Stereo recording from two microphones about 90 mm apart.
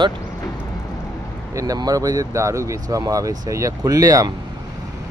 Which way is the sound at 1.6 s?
45° right (ahead or behind).